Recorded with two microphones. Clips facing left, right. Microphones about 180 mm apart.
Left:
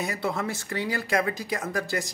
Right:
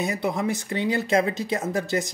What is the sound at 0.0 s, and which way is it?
Speech, 20° right (ahead or behind).